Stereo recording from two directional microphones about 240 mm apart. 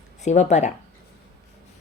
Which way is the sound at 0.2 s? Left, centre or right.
Left.